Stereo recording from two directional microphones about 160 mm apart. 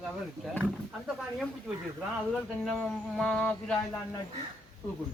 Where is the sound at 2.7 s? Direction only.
5° left (ahead or behind).